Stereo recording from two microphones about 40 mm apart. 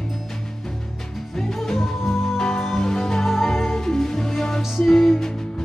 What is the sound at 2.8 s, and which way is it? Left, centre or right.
Music, centre.